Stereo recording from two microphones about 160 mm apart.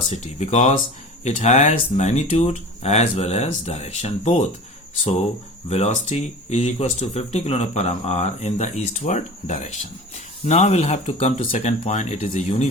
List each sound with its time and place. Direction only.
0.1 s speech: 45° left (ahead or behind)
5.6 s speech: 40° left (ahead or behind)